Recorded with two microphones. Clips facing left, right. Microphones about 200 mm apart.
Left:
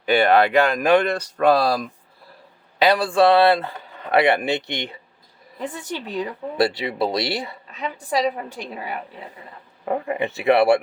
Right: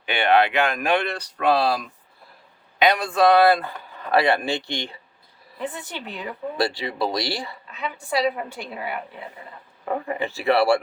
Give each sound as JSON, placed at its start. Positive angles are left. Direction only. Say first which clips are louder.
{"t": 0.0, "sound": "speech", "louder": "left 3 dB", "side_deg": 40}
{"t": 5.8, "sound": "speech", "louder": "left 7 dB", "side_deg": 40}
{"t": 6.6, "sound": "speech", "louder": "left 4 dB", "side_deg": 20}
{"t": 7.8, "sound": "speech", "louder": "left 1 dB", "side_deg": 40}
{"t": 9.8, "sound": "speech", "louder": "left 3 dB", "side_deg": 20}